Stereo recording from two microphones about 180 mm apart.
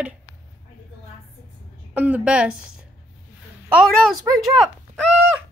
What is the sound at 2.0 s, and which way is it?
Speech, 10° right (ahead or behind).